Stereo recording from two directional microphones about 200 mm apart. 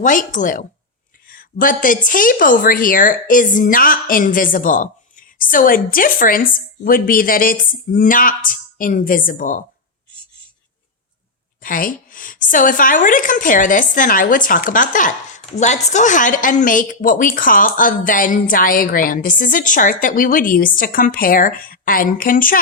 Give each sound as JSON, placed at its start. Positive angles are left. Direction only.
{"t": 0.0, "sound": "a woman's voice", "side_deg": 40}
{"t": 11.6, "sound": "a woman's voice", "side_deg": 45}